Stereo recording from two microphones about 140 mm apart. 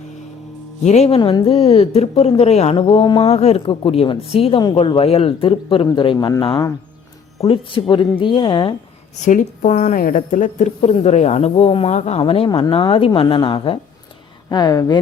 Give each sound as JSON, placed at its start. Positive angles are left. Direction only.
{"t": 0.9, "sound": "a woman's voice", "side_deg": 50}
{"t": 1.2, "sound": "a woman's voice", "side_deg": 35}
{"t": 3.3, "sound": "a woman's voice", "side_deg": 45}
{"t": 7.4, "sound": "speech", "side_deg": 40}
{"t": 9.2, "sound": "a woman's voice", "side_deg": 60}